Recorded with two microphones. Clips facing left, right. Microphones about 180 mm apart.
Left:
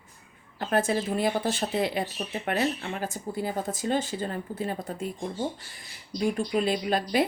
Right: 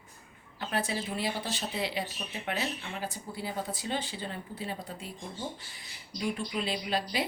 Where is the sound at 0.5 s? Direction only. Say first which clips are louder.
Left 7 dB; 45° left (ahead or behind).